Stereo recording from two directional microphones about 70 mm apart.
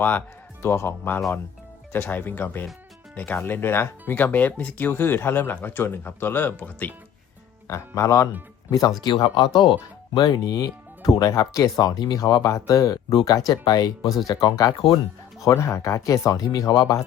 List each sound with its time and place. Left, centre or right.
0.0 s speech: left
7.7 s speech: left
8.7 s speech: left
10.2 s speech: left
12.5 s speech: left
15.4 s speech: left